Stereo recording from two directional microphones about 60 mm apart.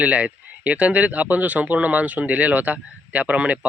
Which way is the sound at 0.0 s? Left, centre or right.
Right.